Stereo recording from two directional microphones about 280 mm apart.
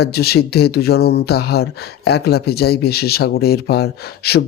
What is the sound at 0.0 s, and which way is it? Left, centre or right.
Speech, left.